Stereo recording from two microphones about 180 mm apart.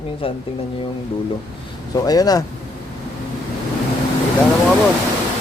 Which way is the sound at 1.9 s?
20° left (ahead or behind).